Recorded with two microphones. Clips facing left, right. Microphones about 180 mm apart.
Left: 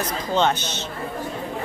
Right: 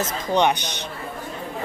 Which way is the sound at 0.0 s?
15° right (ahead or behind).